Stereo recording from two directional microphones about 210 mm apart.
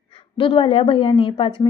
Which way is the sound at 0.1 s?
25° left (ahead or behind).